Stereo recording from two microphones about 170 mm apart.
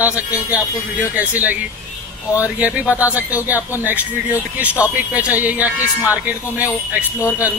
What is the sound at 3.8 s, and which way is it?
Speech, 10° right (ahead or behind).